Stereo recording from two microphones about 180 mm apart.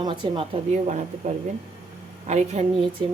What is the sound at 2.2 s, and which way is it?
Speech, 40° right (ahead or behind).